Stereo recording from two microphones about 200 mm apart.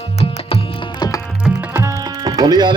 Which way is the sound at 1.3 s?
5° right (ahead or behind).